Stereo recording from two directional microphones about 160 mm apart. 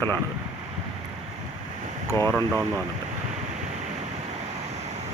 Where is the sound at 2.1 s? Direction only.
20° left (ahead or behind).